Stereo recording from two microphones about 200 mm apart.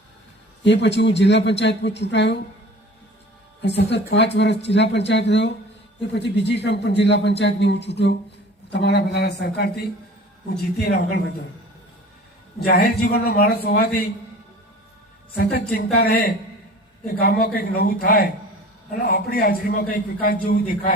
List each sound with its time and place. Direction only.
0.6 s a man's voice: 60° left (ahead or behind)
3.6 s a man's voice: 60° left (ahead or behind)
10.8 s a man's voice: 55° left (ahead or behind)
12.5 s a man's voice: 50° left (ahead or behind)
15.5 s a man's voice: 50° left (ahead or behind)